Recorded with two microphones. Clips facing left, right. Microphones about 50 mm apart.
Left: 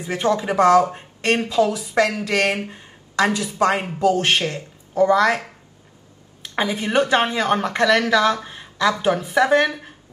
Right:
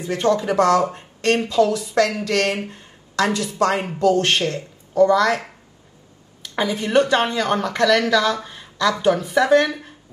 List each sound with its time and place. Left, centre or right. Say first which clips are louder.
0.0 s speech: right 1 dB; centre
6.4 s speech: even; centre
8.5 s a sound: left 1 dB; centre
9.0 s speech: right 1 dB; centre